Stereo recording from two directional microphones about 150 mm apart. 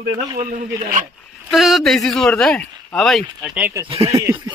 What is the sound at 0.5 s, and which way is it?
Speech, 65° right (ahead or behind).